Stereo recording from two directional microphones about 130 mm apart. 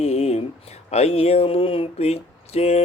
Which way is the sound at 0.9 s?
55° left (ahead or behind).